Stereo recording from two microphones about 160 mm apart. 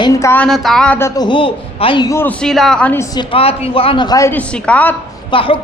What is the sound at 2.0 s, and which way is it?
Speech, 15° left (ahead or behind).